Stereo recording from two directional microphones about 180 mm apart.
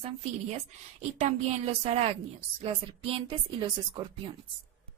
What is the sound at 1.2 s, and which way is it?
A woman's voice, 35° right (ahead or behind).